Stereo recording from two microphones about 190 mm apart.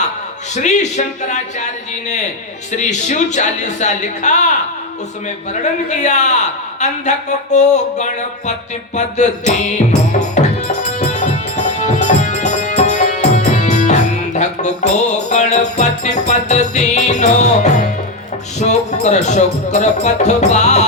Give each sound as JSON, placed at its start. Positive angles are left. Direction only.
{"t": 0.5, "sound": "music", "side_deg": 40}
{"t": 2.7, "sound": "music", "side_deg": 40}
{"t": 6.0, "sound": "music", "side_deg": 40}